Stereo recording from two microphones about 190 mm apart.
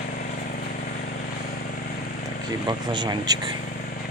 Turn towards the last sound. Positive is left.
turn(degrees=-20)  # may be behind; listen again after turning